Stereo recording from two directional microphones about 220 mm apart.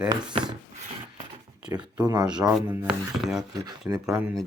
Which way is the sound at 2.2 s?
5° right (ahead or behind).